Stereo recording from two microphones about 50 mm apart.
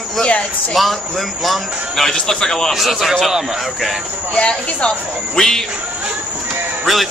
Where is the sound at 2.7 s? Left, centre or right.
Centre.